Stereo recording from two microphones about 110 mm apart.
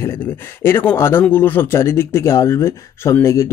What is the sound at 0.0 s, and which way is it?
Speech, 20° left (ahead or behind).